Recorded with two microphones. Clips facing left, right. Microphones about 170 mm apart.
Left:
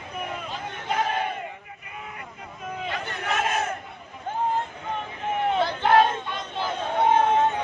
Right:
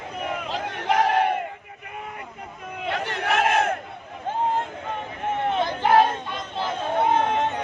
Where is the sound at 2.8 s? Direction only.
70° right (ahead or behind).